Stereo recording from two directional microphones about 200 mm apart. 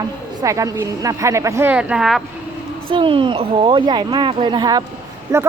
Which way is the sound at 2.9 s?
25° right (ahead or behind).